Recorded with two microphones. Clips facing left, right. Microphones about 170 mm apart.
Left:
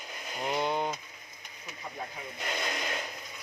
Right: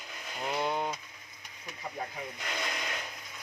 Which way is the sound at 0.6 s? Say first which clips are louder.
Left 1 dB; centre (ahead or behind).